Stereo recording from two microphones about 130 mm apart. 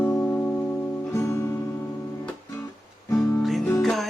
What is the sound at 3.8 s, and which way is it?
Music, centre (ahead or behind).